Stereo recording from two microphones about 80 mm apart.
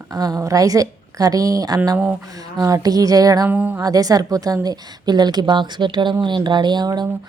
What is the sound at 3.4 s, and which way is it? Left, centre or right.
Speech, right.